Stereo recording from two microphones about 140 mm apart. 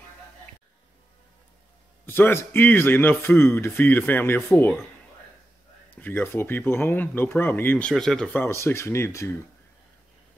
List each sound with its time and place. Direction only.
2.0 s a man's voice: 15° left (ahead or behind)
5.9 s a man's voice: 15° left (ahead or behind)
8.4 s speech: 15° left (ahead or behind)